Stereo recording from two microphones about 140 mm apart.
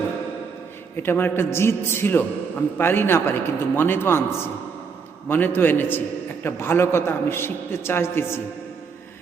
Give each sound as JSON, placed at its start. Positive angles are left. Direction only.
{"t": 0.9, "sound": "a man's voice", "side_deg": 15}